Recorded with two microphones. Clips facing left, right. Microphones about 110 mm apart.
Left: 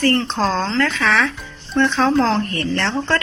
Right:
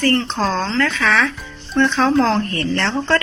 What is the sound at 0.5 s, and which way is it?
Speech, 20° left (ahead or behind).